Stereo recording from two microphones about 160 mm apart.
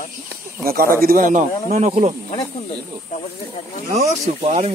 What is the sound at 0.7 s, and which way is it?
Speech, 70° right (ahead or behind).